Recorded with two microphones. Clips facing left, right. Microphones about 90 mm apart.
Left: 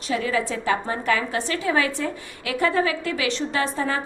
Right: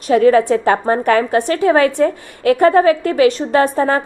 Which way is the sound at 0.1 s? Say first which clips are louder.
Right 13 dB; 55° right (ahead or behind).